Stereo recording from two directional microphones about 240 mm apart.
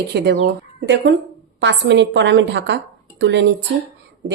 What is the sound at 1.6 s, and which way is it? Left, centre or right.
A woman's voice, right.